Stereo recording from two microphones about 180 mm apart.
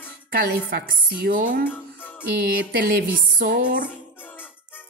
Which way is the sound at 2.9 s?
55° right (ahead or behind).